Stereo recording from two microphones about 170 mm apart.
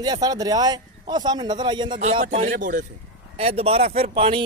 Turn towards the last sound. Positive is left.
turn(degrees=-35)  # may be behind; listen again after turning